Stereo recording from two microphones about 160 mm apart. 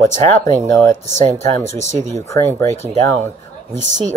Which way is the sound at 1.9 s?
50° right (ahead or behind).